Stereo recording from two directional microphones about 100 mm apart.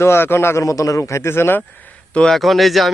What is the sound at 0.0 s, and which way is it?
A man's voice, 25° left (ahead or behind).